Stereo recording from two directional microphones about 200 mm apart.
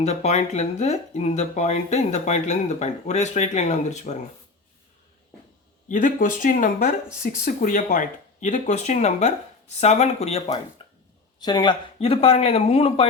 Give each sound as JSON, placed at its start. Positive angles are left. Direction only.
{"t": 0.0, "sound": "speech", "side_deg": 35}
{"t": 5.9, "sound": "speech", "side_deg": 40}
{"t": 10.8, "sound": "a sound", "side_deg": 25}
{"t": 11.3, "sound": "a man's voice", "side_deg": 20}